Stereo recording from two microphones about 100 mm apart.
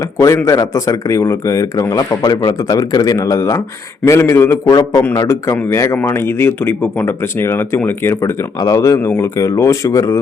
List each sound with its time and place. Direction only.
0.2 s speech: 30° left (ahead or behind)
4.7 s a man's voice: 45° left (ahead or behind); by 8.3 s 25° left (ahead or behind)
8.6 s speech: 35° left (ahead or behind)